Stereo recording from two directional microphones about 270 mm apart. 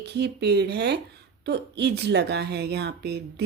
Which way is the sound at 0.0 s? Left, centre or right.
Right.